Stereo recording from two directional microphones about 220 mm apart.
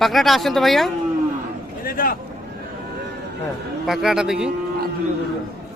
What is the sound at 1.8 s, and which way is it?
Vehicle, 40° left (ahead or behind).